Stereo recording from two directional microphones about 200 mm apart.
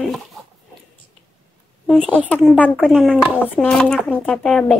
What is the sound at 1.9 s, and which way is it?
A child's voice, 5° left (ahead or behind).